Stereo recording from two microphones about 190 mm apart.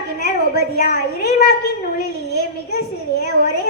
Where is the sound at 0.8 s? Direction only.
55° left (ahead or behind).